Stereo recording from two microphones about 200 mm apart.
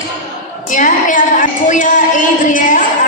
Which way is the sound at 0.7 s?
40° left (ahead or behind).